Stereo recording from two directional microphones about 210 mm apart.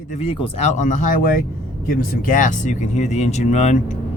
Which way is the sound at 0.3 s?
30° left (ahead or behind).